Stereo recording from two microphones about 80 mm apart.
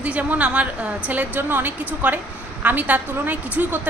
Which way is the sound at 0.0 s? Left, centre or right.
Centre.